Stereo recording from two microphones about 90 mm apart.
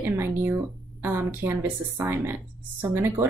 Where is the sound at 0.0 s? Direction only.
25° right (ahead or behind).